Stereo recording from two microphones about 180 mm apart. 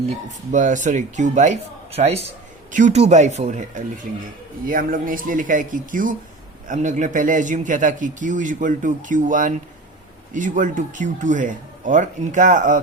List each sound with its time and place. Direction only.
0.5 s a man's voice: 45° right (ahead or behind)